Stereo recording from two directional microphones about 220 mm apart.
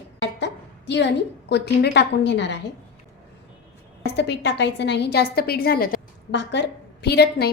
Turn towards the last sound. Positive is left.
turn(degrees=45)  # may be behind; listen again after turning